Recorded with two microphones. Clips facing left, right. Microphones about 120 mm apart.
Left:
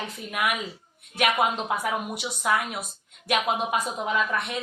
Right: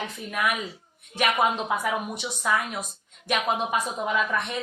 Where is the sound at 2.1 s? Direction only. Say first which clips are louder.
Left 1 dB; 10° left (ahead or behind).